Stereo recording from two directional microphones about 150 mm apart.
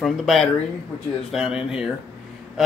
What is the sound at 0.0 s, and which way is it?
A man's voice, centre (ahead or behind).